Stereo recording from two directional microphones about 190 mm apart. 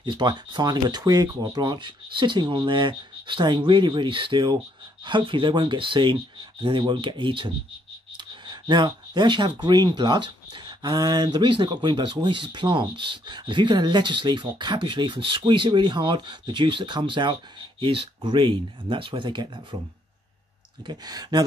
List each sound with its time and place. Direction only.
0.0 s speech: 25° right (ahead or behind)
20.8 s speech: 20° right (ahead or behind)